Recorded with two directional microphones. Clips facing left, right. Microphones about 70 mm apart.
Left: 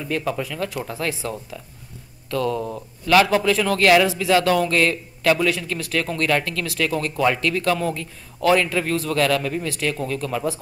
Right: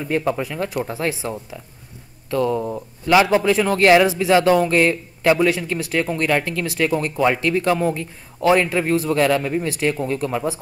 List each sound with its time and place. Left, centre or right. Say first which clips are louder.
0.0 s speech: right 3 dB; right